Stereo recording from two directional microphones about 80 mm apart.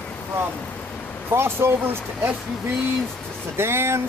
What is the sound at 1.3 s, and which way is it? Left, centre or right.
Speech, right.